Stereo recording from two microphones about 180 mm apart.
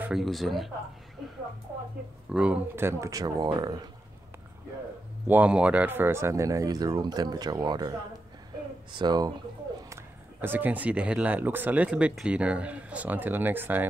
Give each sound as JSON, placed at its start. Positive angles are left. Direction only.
{"t": 0.0, "sound": "speech", "side_deg": 0}
{"t": 2.3, "sound": "speech", "side_deg": -5}
{"t": 5.2, "sound": "speech", "side_deg": -10}
{"t": 8.9, "sound": "speech", "side_deg": -25}
{"t": 10.4, "sound": "speech", "side_deg": -10}